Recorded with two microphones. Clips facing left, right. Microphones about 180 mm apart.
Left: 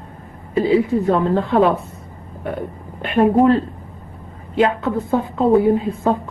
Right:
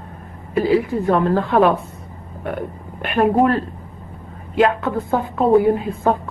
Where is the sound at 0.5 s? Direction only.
25° left (ahead or behind).